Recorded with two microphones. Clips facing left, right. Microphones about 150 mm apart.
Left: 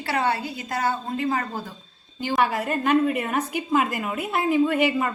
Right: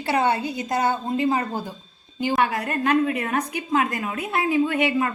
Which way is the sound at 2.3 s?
Centre (ahead or behind).